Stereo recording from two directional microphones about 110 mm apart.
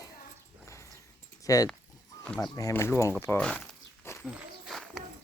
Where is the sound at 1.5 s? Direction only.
30° left (ahead or behind).